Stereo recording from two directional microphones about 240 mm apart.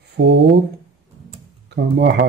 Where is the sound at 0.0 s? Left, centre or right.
Right.